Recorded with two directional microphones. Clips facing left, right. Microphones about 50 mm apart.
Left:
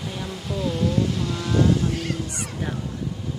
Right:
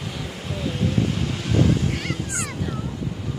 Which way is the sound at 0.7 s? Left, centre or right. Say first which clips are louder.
Even; right.